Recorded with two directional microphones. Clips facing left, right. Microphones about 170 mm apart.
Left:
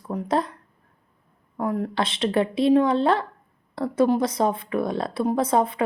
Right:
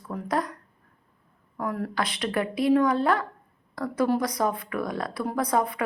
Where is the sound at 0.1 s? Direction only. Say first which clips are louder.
Left 4 dB; 25° left (ahead or behind).